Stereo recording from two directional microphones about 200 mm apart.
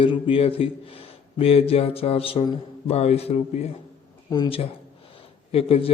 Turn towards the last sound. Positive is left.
turn(degrees=30)  # may be behind; listen again after turning